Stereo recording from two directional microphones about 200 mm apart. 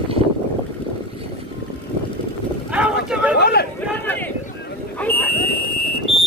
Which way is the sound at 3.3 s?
55° left (ahead or behind).